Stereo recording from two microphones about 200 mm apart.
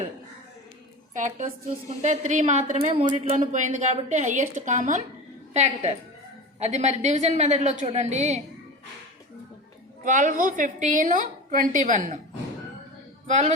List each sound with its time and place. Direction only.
1.1 s a woman's voice: 40° right (ahead or behind)
10.0 s a woman's voice: 40° right (ahead or behind)
13.2 s a man's voice: 35° right (ahead or behind)